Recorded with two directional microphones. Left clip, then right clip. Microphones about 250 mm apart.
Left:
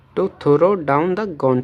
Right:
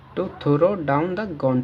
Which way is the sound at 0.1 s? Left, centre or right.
Left.